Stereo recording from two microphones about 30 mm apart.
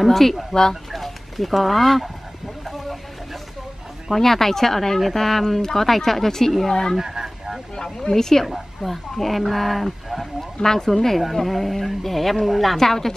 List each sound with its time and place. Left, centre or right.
0.0 s a woman's voice: centre
0.9 s a sound: centre
4.1 s speech: centre
7.0 s a sound: centre
7.7 s speech: left
8.5 s a woman's voice: centre
10.6 s a woman's voice: centre
12.7 s speech: centre